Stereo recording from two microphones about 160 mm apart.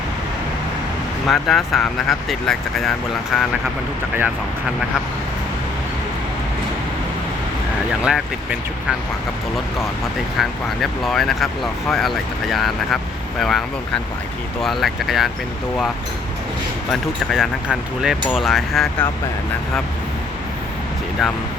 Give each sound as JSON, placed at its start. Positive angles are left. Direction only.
{"t": 1.3, "sound": "speech", "side_deg": 0}
{"t": 8.0, "sound": "speech", "side_deg": -5}
{"t": 10.3, "sound": "speech", "side_deg": 0}
{"t": 16.9, "sound": "speech", "side_deg": 0}